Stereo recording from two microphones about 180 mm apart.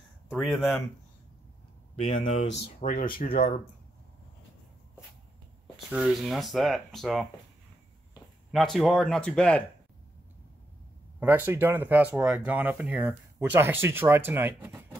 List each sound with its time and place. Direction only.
0.3 s speech: centre (ahead or behind)
2.1 s speech: 45° left (ahead or behind)
2.4 s speech: 75° left (ahead or behind)
2.8 s speech: 50° left (ahead or behind)
3.3 s speech: 35° left (ahead or behind)
5.9 s speech: 5° right (ahead or behind)
8.5 s speech: centre (ahead or behind)
11.1 s speech: 10° right (ahead or behind)